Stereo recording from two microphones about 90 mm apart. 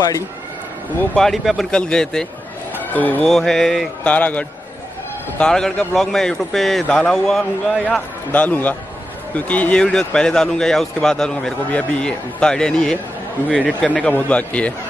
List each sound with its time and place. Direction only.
1.1 s a man's voice: 5° left (ahead or behind)
2.8 s speech: 20° left (ahead or behind)
3.3 s a man's voice: 5° left (ahead or behind)
4.0 s a man's voice: 15° left (ahead or behind)
8.3 s speech: 15° left (ahead or behind)